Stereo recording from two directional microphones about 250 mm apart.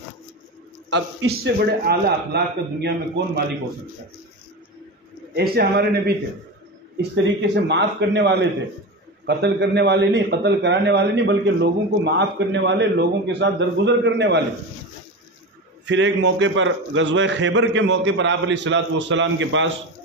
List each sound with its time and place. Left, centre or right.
0.8 s a man's voice: right
5.3 s a man's voice: right
15.8 s a man's voice: right